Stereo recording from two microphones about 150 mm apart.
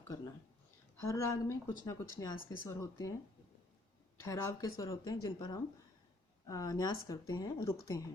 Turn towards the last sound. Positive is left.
turn(degrees=25)  # may be behind; listen again after turning